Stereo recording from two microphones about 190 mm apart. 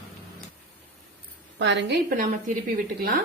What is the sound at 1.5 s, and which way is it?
Speech, 70° right (ahead or behind).